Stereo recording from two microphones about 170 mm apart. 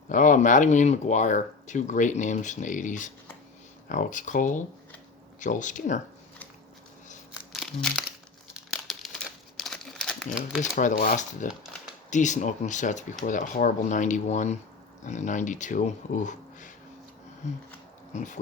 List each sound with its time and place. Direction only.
0.1 s speech: 50° left (ahead or behind)
7.5 s crumpling: centre (ahead or behind)
10.6 s speech: 45° left (ahead or behind)
18.1 s speech: 45° left (ahead or behind)